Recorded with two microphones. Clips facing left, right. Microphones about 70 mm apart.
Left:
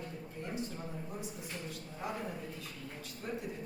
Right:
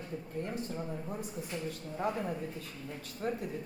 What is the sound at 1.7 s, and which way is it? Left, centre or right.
Speech, right.